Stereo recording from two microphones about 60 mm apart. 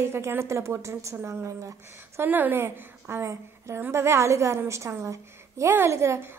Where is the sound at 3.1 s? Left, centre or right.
Right.